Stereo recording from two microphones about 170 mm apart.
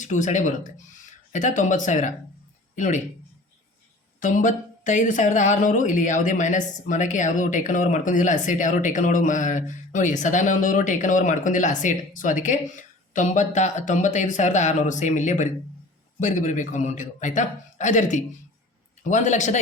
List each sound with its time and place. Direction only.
0.0 s a woman's voice: 45° left (ahead or behind)
4.2 s a woman's voice: 50° left (ahead or behind)